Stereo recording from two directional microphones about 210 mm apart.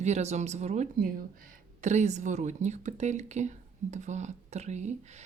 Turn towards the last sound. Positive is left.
turn(degrees=-35)  # may be behind; listen again after turning